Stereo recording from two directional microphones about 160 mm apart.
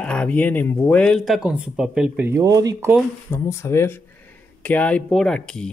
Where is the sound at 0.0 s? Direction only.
5° left (ahead or behind); by 2.9 s 20° right (ahead or behind).